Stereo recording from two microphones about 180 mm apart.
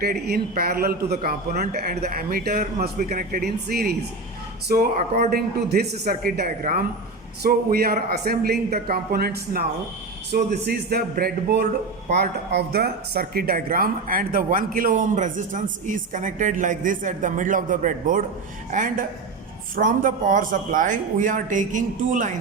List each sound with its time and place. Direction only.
0.0 s speech: 55° right (ahead or behind)